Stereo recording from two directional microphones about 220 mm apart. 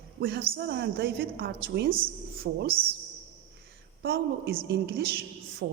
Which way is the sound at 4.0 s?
45° right (ahead or behind).